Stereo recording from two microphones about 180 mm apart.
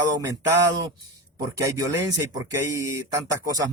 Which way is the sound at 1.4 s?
20° right (ahead or behind).